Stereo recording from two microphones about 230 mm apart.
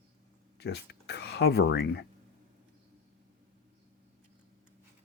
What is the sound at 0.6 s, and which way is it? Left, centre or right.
Speech, left.